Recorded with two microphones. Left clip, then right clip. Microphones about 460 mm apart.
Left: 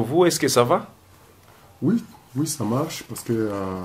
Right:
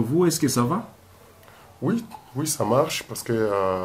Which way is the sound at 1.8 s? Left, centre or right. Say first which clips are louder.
Left 2 dB; right.